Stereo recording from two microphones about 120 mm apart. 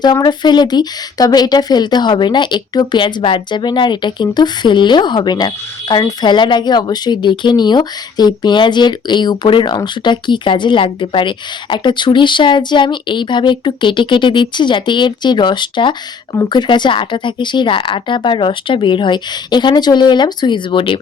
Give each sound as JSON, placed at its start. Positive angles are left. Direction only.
{"t": 0.0, "sound": "speech", "side_deg": 35}